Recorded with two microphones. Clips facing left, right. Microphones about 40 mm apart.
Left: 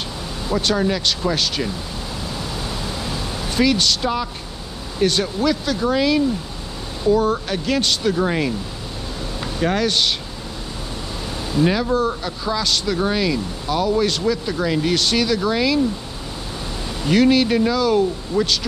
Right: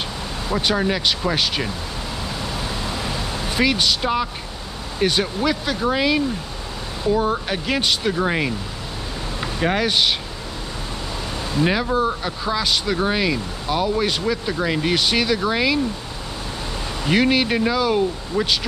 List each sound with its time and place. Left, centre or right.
0.5 s speech: centre
3.1 s vehicle: centre
4.9 s speech: centre
11.5 s speech: centre
17.0 s speech: centre